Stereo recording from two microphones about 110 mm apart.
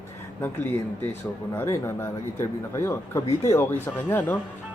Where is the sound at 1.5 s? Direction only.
25° left (ahead or behind).